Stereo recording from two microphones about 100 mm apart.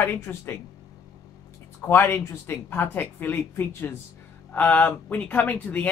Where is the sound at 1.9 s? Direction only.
20° left (ahead or behind).